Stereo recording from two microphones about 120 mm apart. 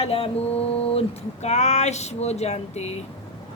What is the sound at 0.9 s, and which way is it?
Speech, 65° left (ahead or behind).